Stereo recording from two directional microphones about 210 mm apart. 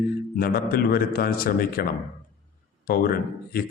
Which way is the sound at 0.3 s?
45° left (ahead or behind).